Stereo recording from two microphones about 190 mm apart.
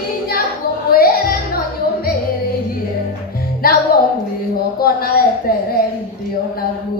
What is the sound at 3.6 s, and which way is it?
Music, 50° left (ahead or behind).